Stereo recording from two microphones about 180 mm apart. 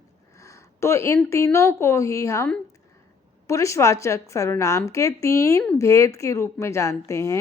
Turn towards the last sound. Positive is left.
turn(degrees=15)  # may be behind; listen again after turning